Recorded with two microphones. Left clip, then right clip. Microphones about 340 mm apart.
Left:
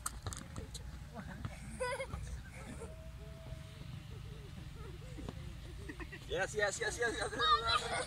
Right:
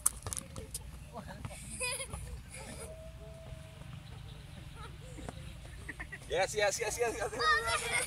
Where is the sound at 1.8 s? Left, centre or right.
Left.